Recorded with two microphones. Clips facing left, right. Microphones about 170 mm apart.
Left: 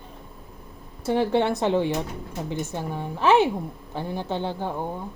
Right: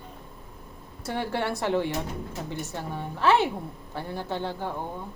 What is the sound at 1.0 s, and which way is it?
A woman's voice, 25° left (ahead or behind).